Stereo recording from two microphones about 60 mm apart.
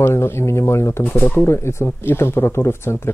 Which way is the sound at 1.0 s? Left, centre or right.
Left.